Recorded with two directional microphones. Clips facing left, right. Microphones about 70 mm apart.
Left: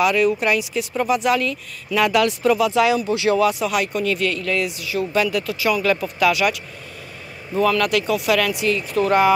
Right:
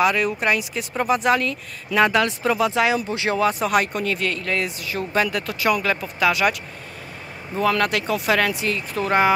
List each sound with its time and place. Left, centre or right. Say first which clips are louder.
0.0 s speech: left 2 dB; right
5.9 s speech: left 3 dB; right
7.7 s speech: left 2 dB; right